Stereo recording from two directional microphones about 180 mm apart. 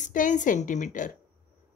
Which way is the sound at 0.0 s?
45° left (ahead or behind).